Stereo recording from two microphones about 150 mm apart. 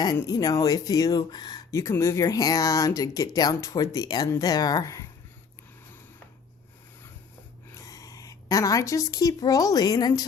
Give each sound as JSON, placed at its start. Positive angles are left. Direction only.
{"t": 0.0, "sound": "speech", "side_deg": 25}
{"t": 7.7, "sound": "a woman's voice", "side_deg": 20}